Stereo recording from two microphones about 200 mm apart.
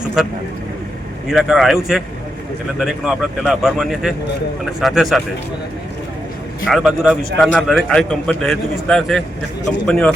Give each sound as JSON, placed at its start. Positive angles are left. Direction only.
{"t": 0.2, "sound": "a man's voice", "side_deg": 0}
{"t": 6.7, "sound": "a man's voice", "side_deg": 0}